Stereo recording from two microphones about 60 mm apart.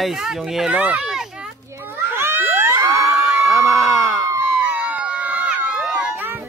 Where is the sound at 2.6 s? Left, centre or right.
Right.